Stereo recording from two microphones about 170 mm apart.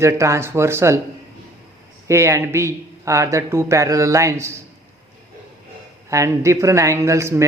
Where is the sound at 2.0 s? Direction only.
15° right (ahead or behind).